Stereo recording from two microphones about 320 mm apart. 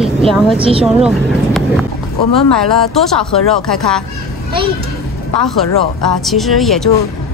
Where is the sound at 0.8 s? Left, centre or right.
Centre.